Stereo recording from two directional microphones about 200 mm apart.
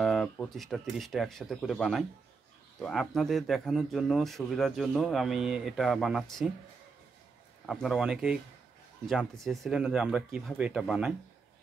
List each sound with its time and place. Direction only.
0.0 s speech: centre (ahead or behind)
7.6 s speech: centre (ahead or behind)